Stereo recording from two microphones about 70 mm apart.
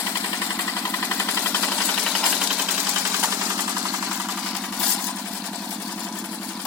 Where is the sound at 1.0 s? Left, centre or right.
Left.